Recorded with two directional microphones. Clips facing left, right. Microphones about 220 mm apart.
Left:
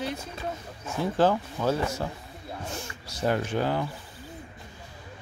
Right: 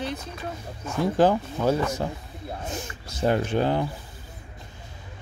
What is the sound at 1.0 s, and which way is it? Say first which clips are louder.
Speech: right 3 dB; 15° right (ahead or behind).